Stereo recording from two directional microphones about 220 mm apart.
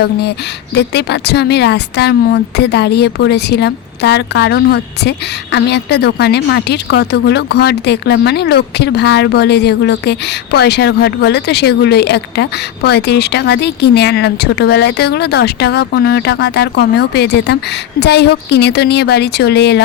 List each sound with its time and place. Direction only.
0.0 s a woman's voice: 50° left (ahead or behind)